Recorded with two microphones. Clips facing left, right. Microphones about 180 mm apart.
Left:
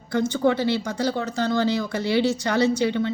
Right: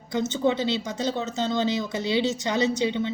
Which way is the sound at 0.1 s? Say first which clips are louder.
Left 3 dB; 20° right (ahead or behind).